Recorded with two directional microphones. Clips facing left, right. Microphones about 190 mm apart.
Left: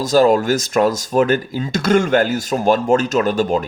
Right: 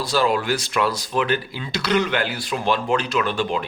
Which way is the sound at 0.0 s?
45° left (ahead or behind).